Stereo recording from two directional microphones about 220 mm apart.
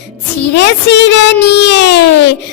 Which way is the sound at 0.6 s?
50° left (ahead or behind).